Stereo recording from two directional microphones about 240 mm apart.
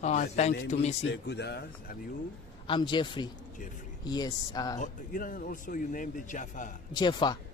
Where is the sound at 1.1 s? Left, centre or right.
Left.